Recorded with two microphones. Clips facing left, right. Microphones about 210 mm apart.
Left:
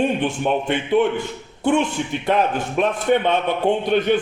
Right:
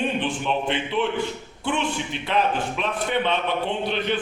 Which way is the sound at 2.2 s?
50° left (ahead or behind).